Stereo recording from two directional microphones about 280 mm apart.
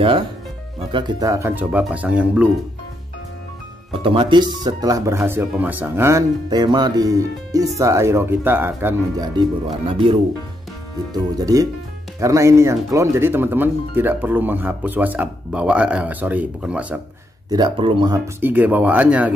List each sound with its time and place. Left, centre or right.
0.7 s speech: centre
3.9 s speech: centre
11.3 s speech: centre
17.5 s speech: centre